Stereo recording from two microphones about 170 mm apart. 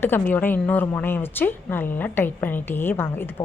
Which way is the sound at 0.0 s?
10° left (ahead or behind).